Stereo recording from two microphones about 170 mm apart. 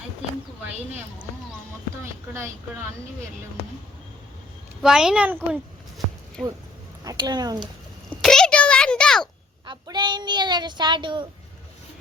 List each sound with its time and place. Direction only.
4.8 s speech: 5° right (ahead or behind)
7.0 s speech: 20° right (ahead or behind)
8.2 s a sound: 5° left (ahead or behind)
9.6 s speech: 25° right (ahead or behind)